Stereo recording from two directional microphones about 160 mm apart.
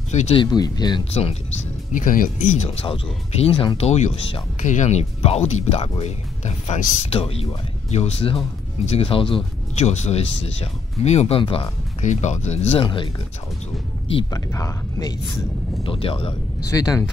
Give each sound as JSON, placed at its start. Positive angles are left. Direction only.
{"t": 0.1, "sound": "speech", "side_deg": 45}
{"t": 0.4, "sound": "speech", "side_deg": 25}
{"t": 2.0, "sound": "speech", "side_deg": 55}
{"t": 12.0, "sound": "speech", "side_deg": 45}
{"t": 14.3, "sound": "speech", "side_deg": 20}
{"t": 16.7, "sound": "speech", "side_deg": 20}